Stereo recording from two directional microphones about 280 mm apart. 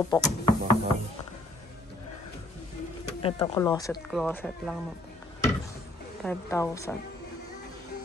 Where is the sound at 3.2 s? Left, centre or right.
Centre.